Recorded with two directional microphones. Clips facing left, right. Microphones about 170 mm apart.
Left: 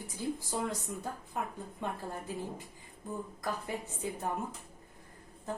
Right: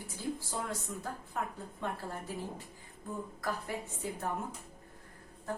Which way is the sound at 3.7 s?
20° left (ahead or behind).